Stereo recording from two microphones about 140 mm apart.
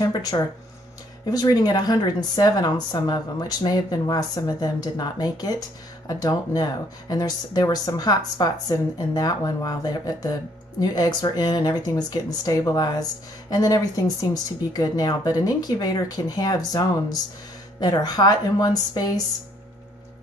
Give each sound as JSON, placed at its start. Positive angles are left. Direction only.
{"t": 0.0, "sound": "speech", "side_deg": 25}